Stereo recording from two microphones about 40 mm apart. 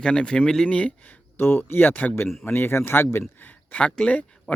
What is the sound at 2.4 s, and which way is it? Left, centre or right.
Speech, left.